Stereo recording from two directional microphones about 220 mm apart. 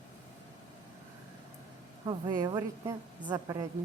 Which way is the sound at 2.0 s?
20° right (ahead or behind).